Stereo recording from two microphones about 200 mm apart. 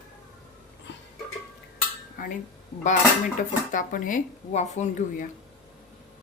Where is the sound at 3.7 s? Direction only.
40° left (ahead or behind).